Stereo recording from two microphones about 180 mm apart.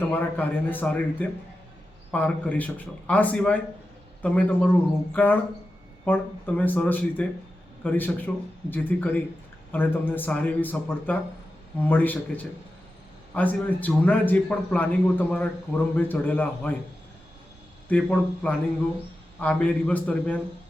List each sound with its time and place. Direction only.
0.1 s a man's voice: 10° left (ahead or behind)
13.3 s a man's voice: 10° left (ahead or behind)
17.8 s a man's voice: 5° left (ahead or behind)